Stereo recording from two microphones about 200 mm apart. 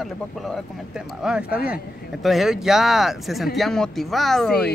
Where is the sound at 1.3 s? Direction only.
Centre (ahead or behind).